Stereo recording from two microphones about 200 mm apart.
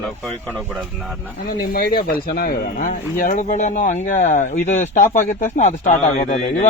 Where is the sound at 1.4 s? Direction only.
50° left (ahead or behind).